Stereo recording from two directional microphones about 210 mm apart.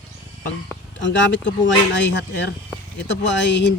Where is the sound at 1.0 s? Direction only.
60° left (ahead or behind).